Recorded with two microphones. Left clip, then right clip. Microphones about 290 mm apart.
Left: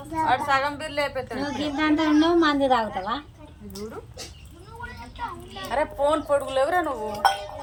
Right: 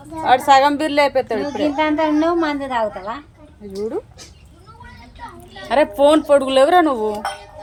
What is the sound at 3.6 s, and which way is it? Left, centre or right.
Speech, right.